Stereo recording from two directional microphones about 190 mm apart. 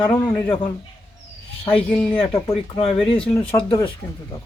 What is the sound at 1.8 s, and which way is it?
Speech, 5° left (ahead or behind).